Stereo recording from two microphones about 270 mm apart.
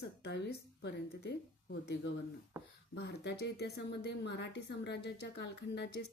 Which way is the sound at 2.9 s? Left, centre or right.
Left.